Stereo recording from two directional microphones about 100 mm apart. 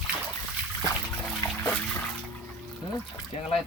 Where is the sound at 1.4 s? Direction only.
45° left (ahead or behind).